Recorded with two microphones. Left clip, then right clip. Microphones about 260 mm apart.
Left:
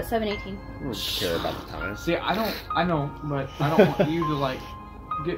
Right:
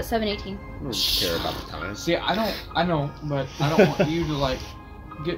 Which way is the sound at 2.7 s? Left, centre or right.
Centre.